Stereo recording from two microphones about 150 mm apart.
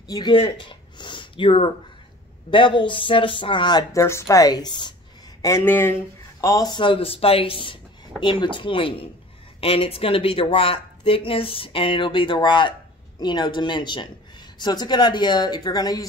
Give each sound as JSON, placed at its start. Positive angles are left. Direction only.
{"t": 0.1, "sound": "a woman's voice", "side_deg": 30}
{"t": 5.4, "sound": "a woman's voice", "side_deg": 15}